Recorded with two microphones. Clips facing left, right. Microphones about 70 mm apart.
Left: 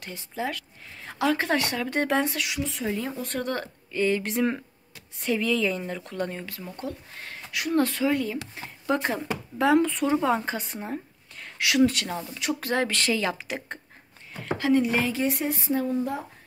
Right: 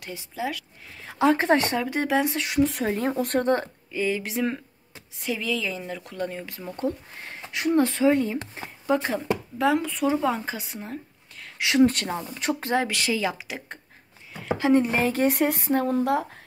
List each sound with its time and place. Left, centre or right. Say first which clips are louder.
0.1 s a woman's voice: right 1 dB; centre
1.1 s speech: right 4 dB; right
1.8 s a woman's voice: right 1 dB; centre
2.4 s a woman's voice: right 7 dB; right
3.3 s speech: right 7 dB; right
3.9 s speech: left 2 dB; centre
6.4 s speech: right 6 dB; right
8.8 s speech: right 2 dB; centre
11.5 s speech: right 2 dB; right
12.6 s a woman's voice: even; centre
14.8 s speech: right 2 dB; right
15.2 s a woman's voice: right 4 dB; right